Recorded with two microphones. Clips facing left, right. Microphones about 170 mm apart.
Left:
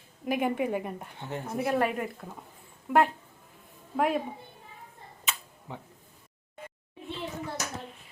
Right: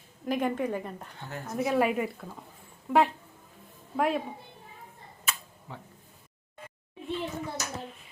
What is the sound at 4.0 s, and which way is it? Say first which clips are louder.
Speech: even; centre (ahead or behind).